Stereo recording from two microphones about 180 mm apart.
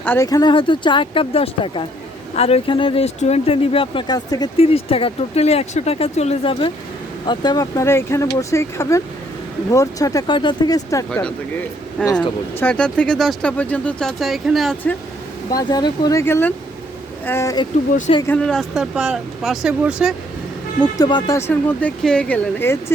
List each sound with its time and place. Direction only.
0.0 s speech: 15° left (ahead or behind)
12.0 s speech: 5° left (ahead or behind)
15.4 s speech: 20° left (ahead or behind)
18.3 s speech: 5° left (ahead or behind)
21.0 s speech: 25° left (ahead or behind)